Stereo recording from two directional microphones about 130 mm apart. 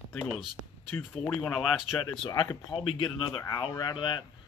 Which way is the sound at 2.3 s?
25° left (ahead or behind).